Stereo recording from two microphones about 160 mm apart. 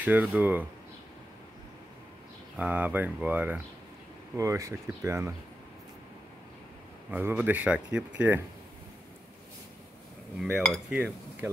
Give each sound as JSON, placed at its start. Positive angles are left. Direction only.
{"t": 0.0, "sound": "speech", "side_deg": -10}
{"t": 2.5, "sound": "speech", "side_deg": -10}
{"t": 7.1, "sound": "speech", "side_deg": -10}
{"t": 10.4, "sound": "speech", "side_deg": -5}